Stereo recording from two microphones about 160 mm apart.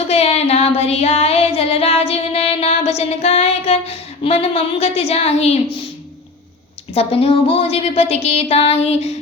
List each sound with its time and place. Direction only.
0.1 s music: 40° left (ahead or behind)
6.9 s music: 35° left (ahead or behind)